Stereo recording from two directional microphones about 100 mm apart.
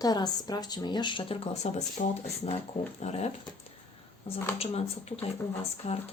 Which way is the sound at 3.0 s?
90° left.